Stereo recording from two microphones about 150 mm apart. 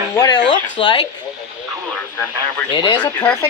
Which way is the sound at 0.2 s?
30° left (ahead or behind).